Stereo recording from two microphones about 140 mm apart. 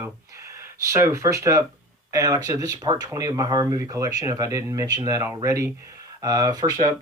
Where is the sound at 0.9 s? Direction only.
20° right (ahead or behind).